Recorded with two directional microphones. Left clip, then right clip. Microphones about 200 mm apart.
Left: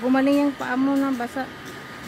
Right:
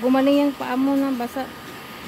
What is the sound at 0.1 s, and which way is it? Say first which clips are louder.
Speech: even; 10° right (ahead or behind).